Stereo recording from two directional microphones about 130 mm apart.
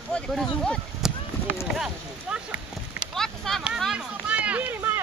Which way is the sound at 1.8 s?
5° right (ahead or behind).